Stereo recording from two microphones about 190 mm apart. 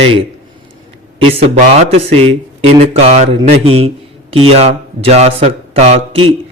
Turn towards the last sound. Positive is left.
turn(degrees=-30)  # may be behind; listen again after turning